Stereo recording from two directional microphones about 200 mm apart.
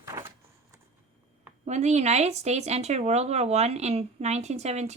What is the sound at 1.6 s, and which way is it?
Speech, 35° right (ahead or behind).